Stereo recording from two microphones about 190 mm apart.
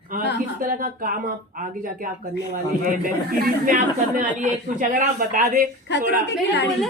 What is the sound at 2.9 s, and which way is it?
Speech, 50° right (ahead or behind).